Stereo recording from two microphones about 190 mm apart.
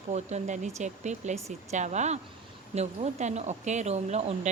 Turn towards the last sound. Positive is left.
turn(degrees=-35)  # may be behind; listen again after turning